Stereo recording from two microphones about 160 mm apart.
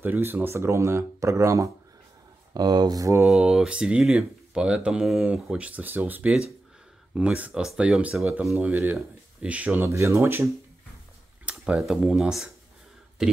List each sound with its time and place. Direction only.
0.0 s speech: 10° right (ahead or behind)
3.3 s speech: 5° right (ahead or behind)